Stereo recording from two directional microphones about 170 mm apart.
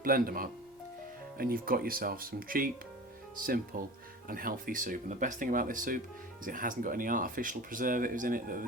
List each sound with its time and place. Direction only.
0.0 s speech: 55° right (ahead or behind)